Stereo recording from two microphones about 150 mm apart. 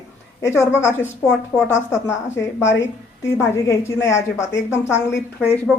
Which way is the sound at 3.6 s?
20° left (ahead or behind).